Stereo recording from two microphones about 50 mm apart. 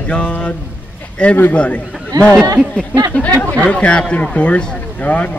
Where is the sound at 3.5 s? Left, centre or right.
Left.